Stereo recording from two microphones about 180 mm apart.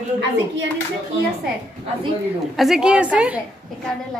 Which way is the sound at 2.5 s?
Centre (ahead or behind).